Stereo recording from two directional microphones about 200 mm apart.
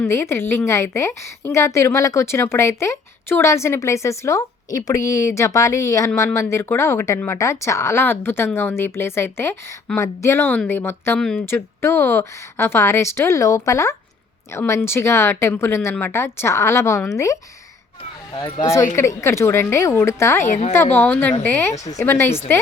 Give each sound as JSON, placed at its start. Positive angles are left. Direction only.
{"t": 0.0, "sound": "a woman's voice", "side_deg": 15}
{"t": 18.6, "sound": "a woman's voice", "side_deg": 15}
{"t": 20.4, "sound": "a woman's voice", "side_deg": 35}
{"t": 20.9, "sound": "a woman's voice", "side_deg": 10}